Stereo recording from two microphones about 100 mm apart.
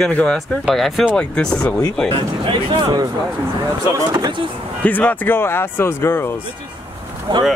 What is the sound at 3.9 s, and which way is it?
Speech, 35° right (ahead or behind).